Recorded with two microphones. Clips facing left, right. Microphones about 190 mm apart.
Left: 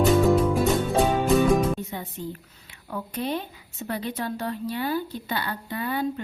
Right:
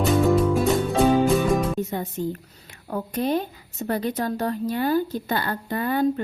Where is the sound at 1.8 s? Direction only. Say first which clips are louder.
Right 7 dB; 45° right (ahead or behind).